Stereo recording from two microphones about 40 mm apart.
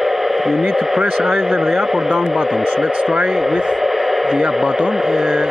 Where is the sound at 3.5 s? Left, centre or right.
Centre.